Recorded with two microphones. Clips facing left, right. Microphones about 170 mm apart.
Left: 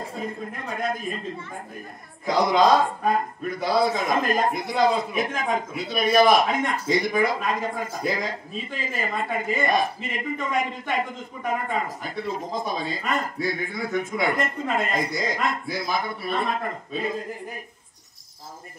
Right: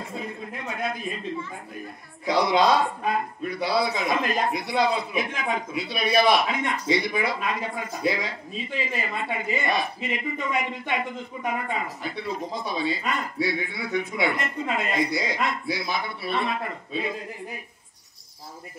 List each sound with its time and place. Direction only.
0.2 s speech: 45° left (ahead or behind)